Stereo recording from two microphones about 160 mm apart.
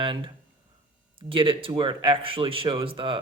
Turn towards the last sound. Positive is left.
turn(degrees=-35)  # may be behind; listen again after turning